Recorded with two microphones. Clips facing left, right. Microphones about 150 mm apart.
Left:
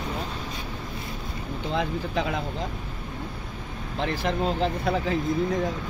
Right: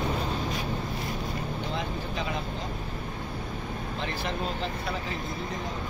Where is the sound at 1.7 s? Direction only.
90° left.